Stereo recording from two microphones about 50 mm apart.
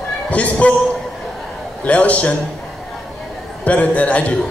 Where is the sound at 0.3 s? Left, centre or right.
Left.